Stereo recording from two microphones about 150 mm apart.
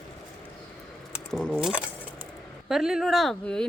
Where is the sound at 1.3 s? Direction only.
5° left (ahead or behind).